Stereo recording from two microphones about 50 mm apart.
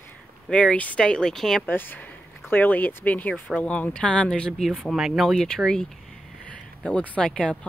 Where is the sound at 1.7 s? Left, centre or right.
Left; by 4.6 s centre.